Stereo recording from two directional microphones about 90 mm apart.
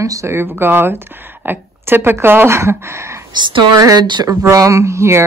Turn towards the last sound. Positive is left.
turn(degrees=-30)  # may be behind; listen again after turning